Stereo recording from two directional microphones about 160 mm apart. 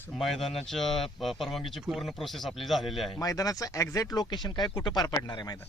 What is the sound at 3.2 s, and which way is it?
Speech, 20° left (ahead or behind).